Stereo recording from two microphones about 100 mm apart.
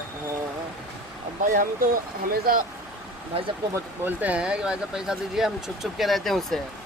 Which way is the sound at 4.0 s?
15° right (ahead or behind).